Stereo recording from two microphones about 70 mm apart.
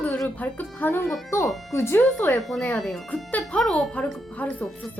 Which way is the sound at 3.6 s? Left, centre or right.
Centre.